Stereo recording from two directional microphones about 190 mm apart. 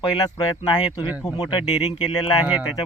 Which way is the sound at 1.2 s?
20° left (ahead or behind).